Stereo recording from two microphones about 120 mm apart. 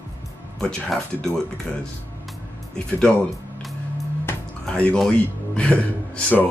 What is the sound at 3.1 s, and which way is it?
Speech, 5° left (ahead or behind).